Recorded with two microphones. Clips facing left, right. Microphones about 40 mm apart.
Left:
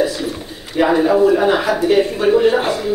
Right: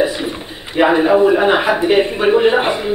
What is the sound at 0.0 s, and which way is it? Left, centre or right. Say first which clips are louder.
A man's voice: right 1 dB; right.